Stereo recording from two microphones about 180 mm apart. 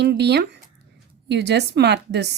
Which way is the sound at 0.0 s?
70° right (ahead or behind).